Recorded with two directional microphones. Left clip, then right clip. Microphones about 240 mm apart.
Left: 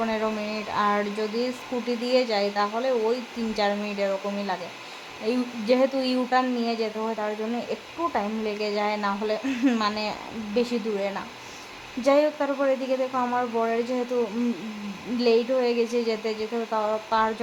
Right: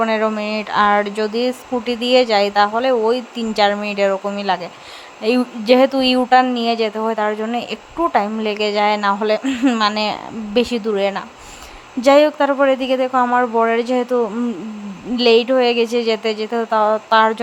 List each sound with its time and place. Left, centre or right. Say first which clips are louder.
0.0 s speech: right 9 dB; right
15.2 s speech: right 9 dB; right